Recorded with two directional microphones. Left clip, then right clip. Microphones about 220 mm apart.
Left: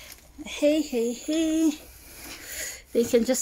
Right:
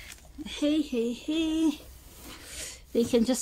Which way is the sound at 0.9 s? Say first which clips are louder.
Left 3 dB; 10° right (ahead or behind).